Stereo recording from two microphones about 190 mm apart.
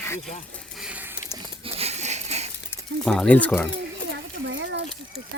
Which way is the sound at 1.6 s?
30° right (ahead or behind).